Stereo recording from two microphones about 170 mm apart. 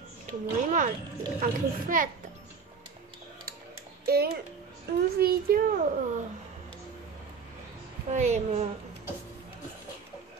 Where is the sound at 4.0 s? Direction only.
65° right (ahead or behind).